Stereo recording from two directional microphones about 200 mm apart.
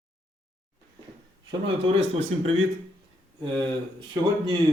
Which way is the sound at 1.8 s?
30° right (ahead or behind).